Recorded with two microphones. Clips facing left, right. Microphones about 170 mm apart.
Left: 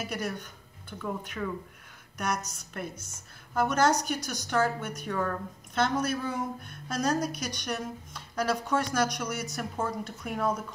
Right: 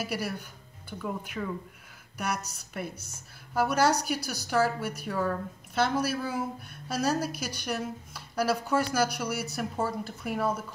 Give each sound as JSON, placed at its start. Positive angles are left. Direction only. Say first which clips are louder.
{"t": 0.0, "sound": "a woman's voice", "louder": "right 1 dB", "side_deg": -10}